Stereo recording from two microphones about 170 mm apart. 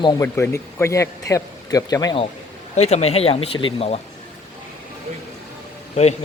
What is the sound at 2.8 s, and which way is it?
Speech, 40° left (ahead or behind).